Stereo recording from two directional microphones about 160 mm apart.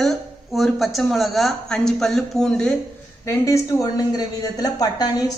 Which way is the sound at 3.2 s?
20° left (ahead or behind).